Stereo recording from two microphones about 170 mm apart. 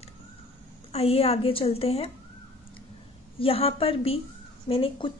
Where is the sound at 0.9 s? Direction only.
35° left (ahead or behind).